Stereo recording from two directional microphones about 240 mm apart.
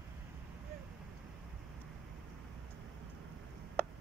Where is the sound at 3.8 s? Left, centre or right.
Centre.